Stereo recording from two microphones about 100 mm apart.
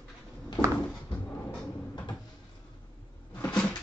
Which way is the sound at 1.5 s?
10° left (ahead or behind).